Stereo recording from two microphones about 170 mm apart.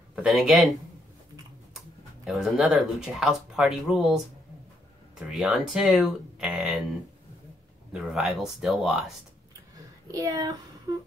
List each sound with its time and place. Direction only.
0.1 s speech: centre (ahead or behind)
2.2 s speech: centre (ahead or behind)
5.3 s speech: centre (ahead or behind)
7.9 s speech: centre (ahead or behind)
10.1 s a woman's voice: 20° right (ahead or behind)